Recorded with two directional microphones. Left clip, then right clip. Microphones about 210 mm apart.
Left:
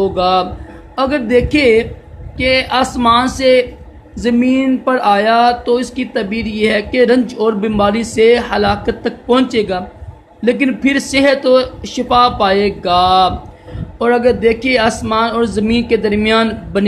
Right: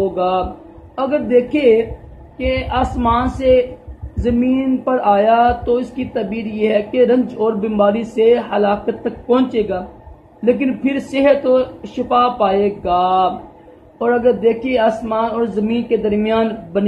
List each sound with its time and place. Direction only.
0.1 s speech: 30° left (ahead or behind)